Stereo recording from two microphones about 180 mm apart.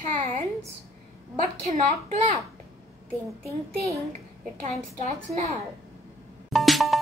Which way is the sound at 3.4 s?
15° right (ahead or behind).